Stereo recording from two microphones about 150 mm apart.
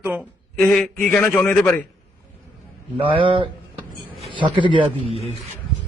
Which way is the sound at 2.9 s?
35° right (ahead or behind).